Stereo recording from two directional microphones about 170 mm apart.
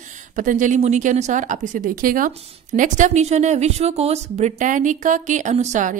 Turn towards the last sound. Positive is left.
turn(degrees=-45)  # may be behind; listen again after turning